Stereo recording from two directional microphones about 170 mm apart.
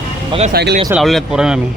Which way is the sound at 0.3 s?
35° right (ahead or behind).